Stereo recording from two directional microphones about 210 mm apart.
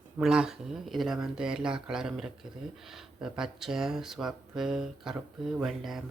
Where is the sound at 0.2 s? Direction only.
5° right (ahead or behind).